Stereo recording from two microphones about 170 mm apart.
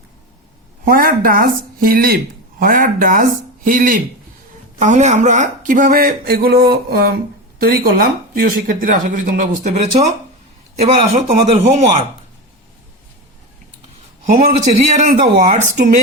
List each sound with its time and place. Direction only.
0.9 s a man's voice: 55° right (ahead or behind); by 12.0 s 35° right (ahead or behind)
14.3 s speech: 50° right (ahead or behind)